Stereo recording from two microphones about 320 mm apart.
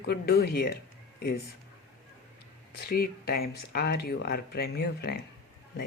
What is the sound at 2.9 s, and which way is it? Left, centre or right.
Speech, left.